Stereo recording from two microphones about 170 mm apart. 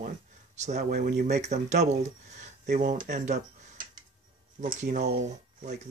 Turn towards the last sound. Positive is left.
turn(degrees=-45)  # may be behind; listen again after turning